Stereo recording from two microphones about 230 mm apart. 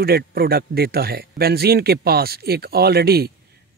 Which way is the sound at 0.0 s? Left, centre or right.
Right.